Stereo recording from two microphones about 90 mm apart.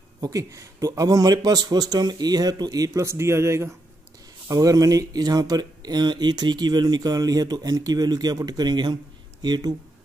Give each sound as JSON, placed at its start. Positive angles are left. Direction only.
{"t": 0.2, "sound": "speech", "side_deg": -40}
{"t": 4.5, "sound": "speech", "side_deg": -45}